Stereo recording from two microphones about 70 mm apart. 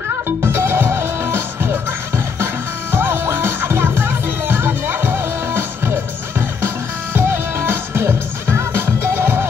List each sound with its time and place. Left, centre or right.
0.4 s music: right
7.2 s music: right